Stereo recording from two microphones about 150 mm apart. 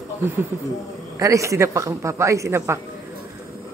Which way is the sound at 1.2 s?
20° right (ahead or behind).